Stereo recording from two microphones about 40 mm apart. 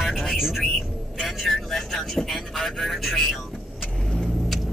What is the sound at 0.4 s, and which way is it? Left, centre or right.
Speech, centre.